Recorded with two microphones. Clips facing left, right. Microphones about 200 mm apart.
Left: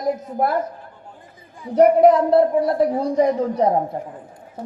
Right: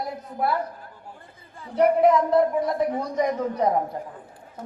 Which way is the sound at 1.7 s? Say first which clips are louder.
Left 5 dB; 40° left (ahead or behind).